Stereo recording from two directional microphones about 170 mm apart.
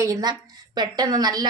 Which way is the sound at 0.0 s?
20° right (ahead or behind).